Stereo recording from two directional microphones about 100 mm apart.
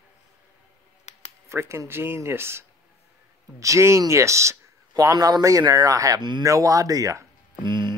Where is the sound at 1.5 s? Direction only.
25° right (ahead or behind).